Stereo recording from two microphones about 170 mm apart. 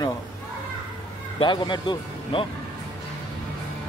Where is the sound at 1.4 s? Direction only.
25° left (ahead or behind).